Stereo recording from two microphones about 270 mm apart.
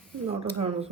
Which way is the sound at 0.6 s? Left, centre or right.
Right.